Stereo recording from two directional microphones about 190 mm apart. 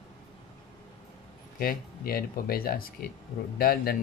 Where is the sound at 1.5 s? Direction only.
50° left (ahead or behind).